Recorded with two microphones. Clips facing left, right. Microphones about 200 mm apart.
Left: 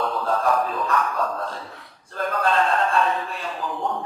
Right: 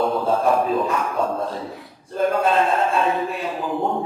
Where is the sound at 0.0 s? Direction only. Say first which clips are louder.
Right 4 dB; 25° right (ahead or behind).